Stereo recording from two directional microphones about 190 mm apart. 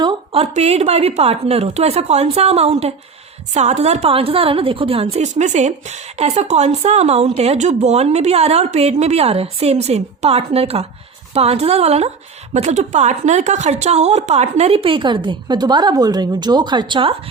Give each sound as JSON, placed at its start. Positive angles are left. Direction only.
{"t": 0.0, "sound": "a woman's voice", "side_deg": -35}